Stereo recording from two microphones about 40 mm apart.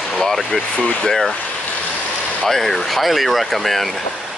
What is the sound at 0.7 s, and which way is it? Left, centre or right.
Speech, left.